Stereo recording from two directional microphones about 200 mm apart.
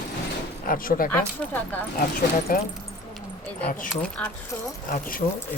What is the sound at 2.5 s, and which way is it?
Speech, 45° left (ahead or behind).